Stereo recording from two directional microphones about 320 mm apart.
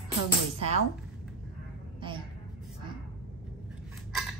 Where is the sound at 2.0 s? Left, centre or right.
Centre.